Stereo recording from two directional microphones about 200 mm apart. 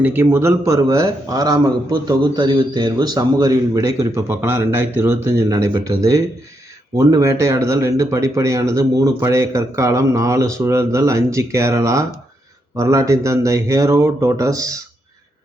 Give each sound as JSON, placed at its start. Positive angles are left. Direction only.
{"t": 0.0, "sound": "a man's voice", "side_deg": -10}